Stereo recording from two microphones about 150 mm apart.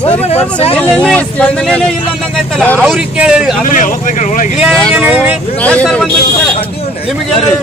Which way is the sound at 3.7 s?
55° left (ahead or behind).